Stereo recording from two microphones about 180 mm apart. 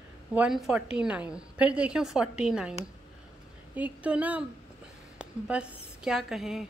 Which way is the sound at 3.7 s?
10° right (ahead or behind).